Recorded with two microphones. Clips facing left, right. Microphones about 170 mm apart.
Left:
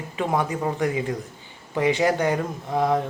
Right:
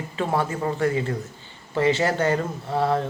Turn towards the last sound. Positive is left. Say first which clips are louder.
# left 1 dB
turn(degrees=15)  # may be behind; listen again after turning